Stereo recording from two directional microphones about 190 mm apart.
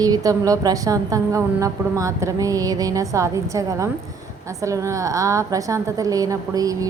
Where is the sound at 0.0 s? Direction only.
20° right (ahead or behind).